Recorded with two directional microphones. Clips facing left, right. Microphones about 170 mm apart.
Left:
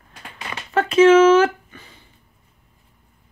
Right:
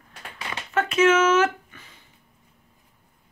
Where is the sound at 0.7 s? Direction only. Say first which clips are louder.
Left 7 dB; 30° left (ahead or behind).